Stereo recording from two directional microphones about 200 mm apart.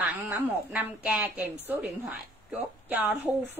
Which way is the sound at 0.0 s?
10° right (ahead or behind).